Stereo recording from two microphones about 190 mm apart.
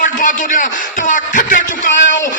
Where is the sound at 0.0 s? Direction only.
45° left (ahead or behind).